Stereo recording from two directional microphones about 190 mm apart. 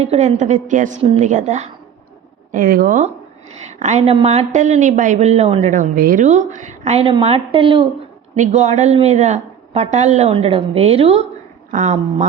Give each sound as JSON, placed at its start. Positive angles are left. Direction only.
{"t": 0.0, "sound": "a woman's voice", "side_deg": -35}
{"t": 2.5, "sound": "a woman's voice", "side_deg": -45}